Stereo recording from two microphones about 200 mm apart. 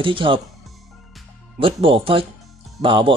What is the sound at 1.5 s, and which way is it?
Speech, 25° right (ahead or behind).